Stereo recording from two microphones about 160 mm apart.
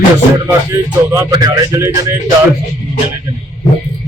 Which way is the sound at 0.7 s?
20° right (ahead or behind).